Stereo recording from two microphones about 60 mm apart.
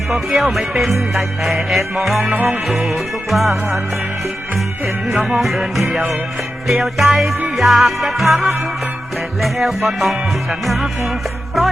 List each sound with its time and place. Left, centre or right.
0.1 s music: centre
2.2 s music: right
2.5 s music: centre
5.1 s music: centre